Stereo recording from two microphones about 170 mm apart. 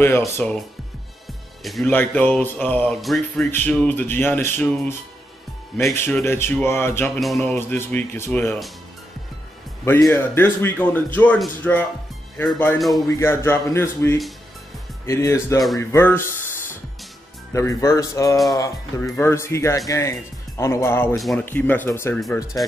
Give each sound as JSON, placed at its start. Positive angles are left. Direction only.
{"t": 0.4, "sound": "speech", "side_deg": 5}
{"t": 1.6, "sound": "speech", "side_deg": 0}
{"t": 5.9, "sound": "speech", "side_deg": 15}
{"t": 7.2, "sound": "speech", "side_deg": 0}
{"t": 7.5, "sound": "speech", "side_deg": 15}
{"t": 10.1, "sound": "speech", "side_deg": 15}
{"t": 13.1, "sound": "speech", "side_deg": 15}
{"t": 21.1, "sound": "speech", "side_deg": 0}